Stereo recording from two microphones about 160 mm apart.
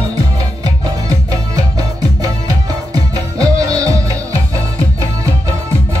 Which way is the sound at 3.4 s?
20° right (ahead or behind).